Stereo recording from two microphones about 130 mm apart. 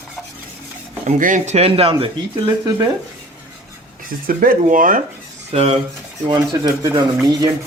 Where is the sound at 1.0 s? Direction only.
80° right; by 2.0 s 45° right (ahead or behind).